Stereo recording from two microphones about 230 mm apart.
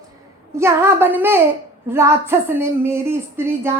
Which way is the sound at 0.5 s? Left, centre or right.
Centre.